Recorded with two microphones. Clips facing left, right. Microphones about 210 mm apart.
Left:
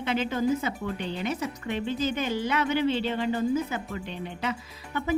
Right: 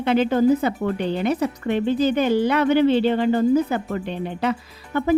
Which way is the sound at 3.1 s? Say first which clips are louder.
Right 8 dB; 55° right (ahead or behind).